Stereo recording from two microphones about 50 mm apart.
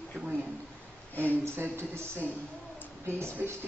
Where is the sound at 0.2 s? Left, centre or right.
Right.